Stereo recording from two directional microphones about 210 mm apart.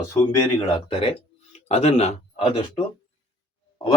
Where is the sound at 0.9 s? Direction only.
25° left (ahead or behind).